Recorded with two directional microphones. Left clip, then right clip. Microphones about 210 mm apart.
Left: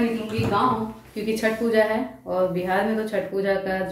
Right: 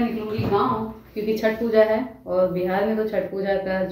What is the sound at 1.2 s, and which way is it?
A woman's voice, centre (ahead or behind).